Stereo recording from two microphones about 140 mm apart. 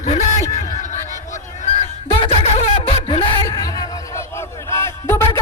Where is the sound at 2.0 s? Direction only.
40° left (ahead or behind).